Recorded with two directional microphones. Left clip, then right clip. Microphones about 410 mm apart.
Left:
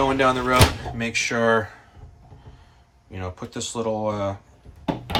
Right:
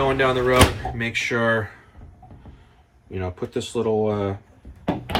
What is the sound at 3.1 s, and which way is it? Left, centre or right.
A man's voice, centre.